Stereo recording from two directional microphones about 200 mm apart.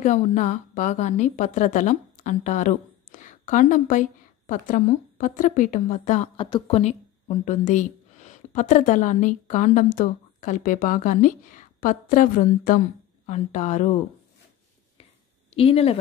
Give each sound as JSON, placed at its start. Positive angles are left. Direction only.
{"t": 0.0, "sound": "a woman's voice", "side_deg": 35}
{"t": 15.5, "sound": "a woman's voice", "side_deg": 30}